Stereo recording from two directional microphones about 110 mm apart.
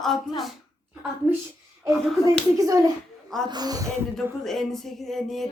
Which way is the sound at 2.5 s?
30° right (ahead or behind).